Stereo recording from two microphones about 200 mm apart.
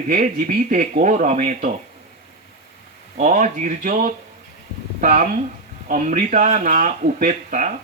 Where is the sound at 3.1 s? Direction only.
40° right (ahead or behind).